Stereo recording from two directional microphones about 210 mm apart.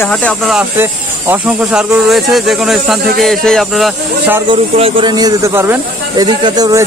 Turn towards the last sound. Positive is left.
turn(degrees=-20)  # may be behind; listen again after turning